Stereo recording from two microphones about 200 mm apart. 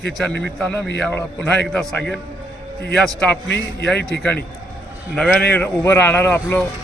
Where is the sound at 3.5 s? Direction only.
55° left (ahead or behind).